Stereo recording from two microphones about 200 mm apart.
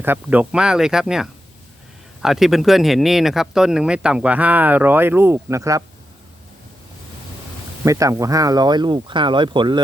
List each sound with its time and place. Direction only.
0.0 s speech: 10° right (ahead or behind)
7.9 s speech: 15° right (ahead or behind)